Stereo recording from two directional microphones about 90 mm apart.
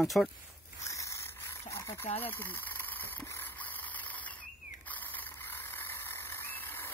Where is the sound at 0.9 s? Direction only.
35° left (ahead or behind).